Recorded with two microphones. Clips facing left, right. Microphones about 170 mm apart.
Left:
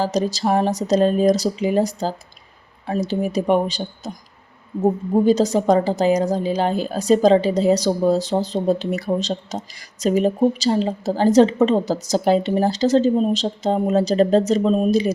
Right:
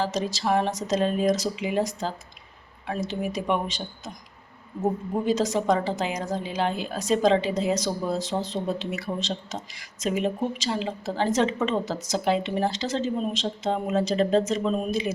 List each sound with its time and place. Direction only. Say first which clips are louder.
0.0 s a woman's voice: left 6 dB; 40° left (ahead or behind)